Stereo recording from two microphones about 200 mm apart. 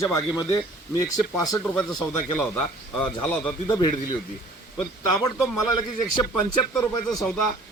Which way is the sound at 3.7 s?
20° left (ahead or behind).